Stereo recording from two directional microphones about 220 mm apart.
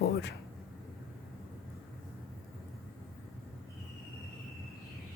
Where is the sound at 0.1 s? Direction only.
50° left (ahead or behind).